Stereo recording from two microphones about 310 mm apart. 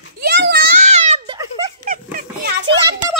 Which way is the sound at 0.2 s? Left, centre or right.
Right.